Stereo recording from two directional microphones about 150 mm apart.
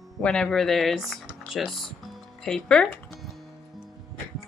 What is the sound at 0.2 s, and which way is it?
Speech, 5° left (ahead or behind).